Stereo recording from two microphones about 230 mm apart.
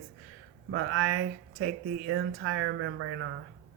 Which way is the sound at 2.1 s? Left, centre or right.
Right.